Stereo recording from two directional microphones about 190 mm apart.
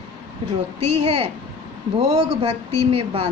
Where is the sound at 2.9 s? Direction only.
30° right (ahead or behind).